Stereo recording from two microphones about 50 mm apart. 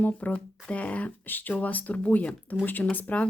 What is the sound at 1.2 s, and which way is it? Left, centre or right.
Speech, left.